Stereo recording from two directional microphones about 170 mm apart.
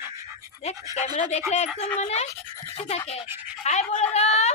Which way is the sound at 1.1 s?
40° left (ahead or behind).